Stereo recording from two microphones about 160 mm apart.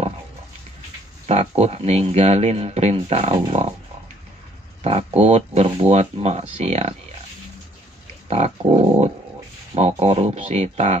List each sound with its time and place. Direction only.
1.2 s speech: 40° right (ahead or behind)
4.8 s speech: 40° right (ahead or behind)
8.3 s speech: 40° right (ahead or behind)